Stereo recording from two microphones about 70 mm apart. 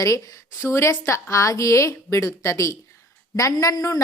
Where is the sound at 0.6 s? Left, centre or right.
Left.